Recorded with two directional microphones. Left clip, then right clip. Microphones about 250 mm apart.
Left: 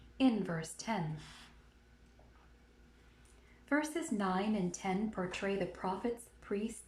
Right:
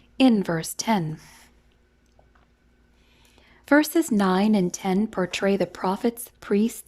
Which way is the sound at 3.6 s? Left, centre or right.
Right.